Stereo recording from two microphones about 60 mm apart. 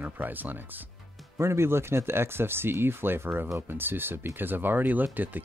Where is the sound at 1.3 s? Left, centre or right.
Right.